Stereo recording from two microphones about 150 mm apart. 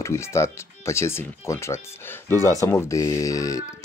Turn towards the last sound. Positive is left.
turn(degrees=20)  # may be behind; listen again after turning